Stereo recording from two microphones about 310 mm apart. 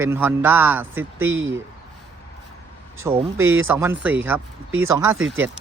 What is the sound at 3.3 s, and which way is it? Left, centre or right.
Speech, right.